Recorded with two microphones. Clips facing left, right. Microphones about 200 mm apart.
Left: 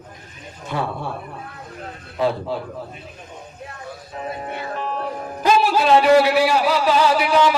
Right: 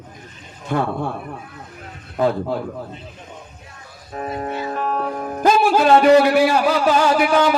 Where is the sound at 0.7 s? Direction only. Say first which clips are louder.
Right 4 dB; 50° right (ahead or behind).